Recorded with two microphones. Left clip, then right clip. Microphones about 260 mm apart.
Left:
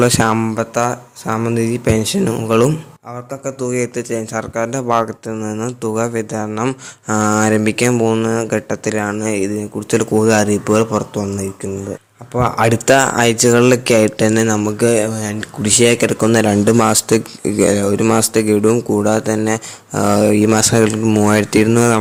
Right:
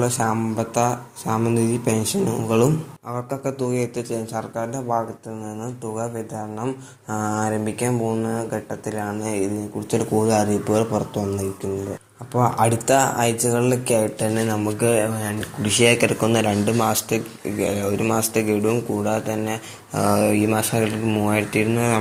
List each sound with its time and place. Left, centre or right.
0.0 s speech: left
3.2 s speech: left